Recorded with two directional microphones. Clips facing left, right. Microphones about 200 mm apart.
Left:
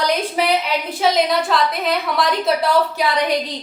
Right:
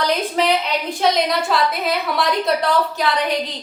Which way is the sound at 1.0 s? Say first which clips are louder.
Left 1 dB; centre (ahead or behind).